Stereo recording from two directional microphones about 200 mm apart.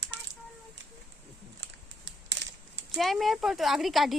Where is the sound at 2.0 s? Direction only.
65° right (ahead or behind).